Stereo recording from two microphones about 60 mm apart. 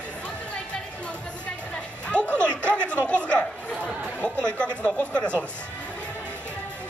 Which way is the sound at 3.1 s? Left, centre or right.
Centre.